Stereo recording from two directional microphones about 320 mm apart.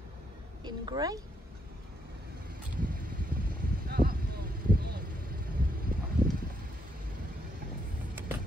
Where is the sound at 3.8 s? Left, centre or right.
Right.